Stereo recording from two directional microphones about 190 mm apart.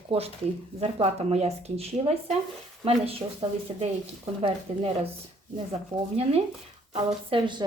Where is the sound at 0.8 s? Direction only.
35° right (ahead or behind).